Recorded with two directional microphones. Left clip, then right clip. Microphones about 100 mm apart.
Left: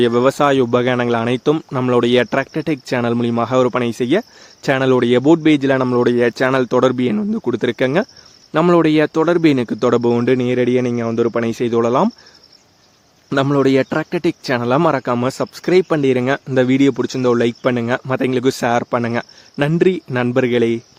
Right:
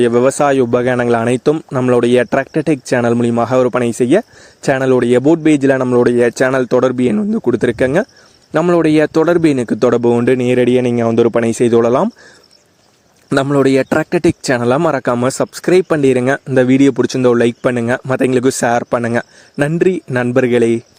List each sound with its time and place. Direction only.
0.0 s speech: 35° right (ahead or behind); by 12.0 s 65° right (ahead or behind)
13.3 s a man's voice: 90° right; by 15.1 s 55° right (ahead or behind)
15.1 s speech: 45° right (ahead or behind)